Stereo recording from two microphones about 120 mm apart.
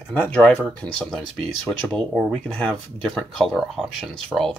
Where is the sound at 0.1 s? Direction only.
10° left (ahead or behind).